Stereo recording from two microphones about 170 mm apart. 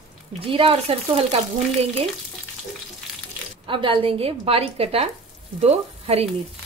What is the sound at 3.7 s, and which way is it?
A woman's voice, 30° right (ahead or behind).